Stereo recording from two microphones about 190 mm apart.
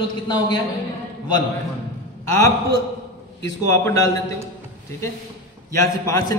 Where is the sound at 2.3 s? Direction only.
15° left (ahead or behind).